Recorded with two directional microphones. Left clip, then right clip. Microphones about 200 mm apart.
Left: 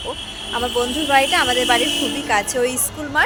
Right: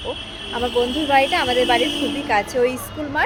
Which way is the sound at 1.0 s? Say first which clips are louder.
Left 2 dB; 5° right (ahead or behind).